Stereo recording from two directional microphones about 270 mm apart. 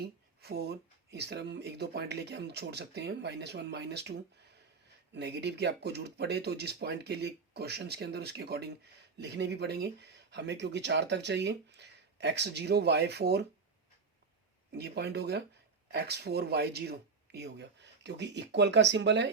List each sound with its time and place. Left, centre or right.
0.0 s speech: right
14.7 s speech: right